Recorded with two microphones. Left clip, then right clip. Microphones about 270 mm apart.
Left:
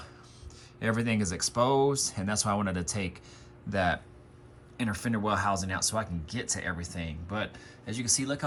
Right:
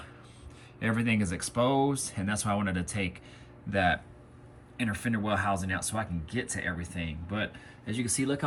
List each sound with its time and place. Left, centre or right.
0.8 s speech: centre